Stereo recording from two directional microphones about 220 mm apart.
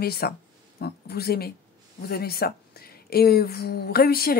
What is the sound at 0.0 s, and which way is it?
Speech, 45° left (ahead or behind).